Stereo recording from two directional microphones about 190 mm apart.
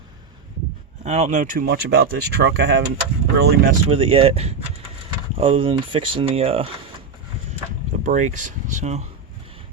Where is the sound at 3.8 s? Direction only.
30° right (ahead or behind).